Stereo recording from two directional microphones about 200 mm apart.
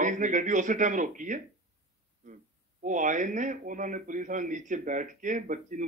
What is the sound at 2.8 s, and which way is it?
Speech, 40° right (ahead or behind).